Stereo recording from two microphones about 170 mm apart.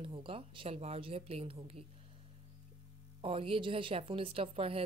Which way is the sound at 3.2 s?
35° right (ahead or behind).